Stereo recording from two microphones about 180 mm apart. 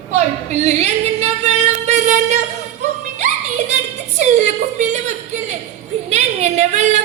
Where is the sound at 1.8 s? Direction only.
40° right (ahead or behind).